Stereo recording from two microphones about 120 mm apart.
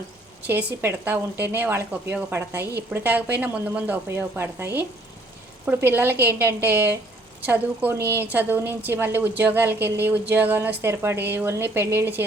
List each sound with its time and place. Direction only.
0.4 s a woman's voice: 15° right (ahead or behind)